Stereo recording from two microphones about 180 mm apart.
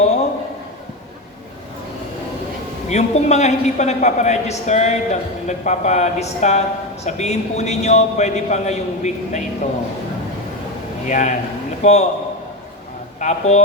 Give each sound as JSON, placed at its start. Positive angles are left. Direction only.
{"t": 2.9, "sound": "a man's voice", "side_deg": 40}
{"t": 11.0, "sound": "a man's voice", "side_deg": 40}
{"t": 13.1, "sound": "speech", "side_deg": 40}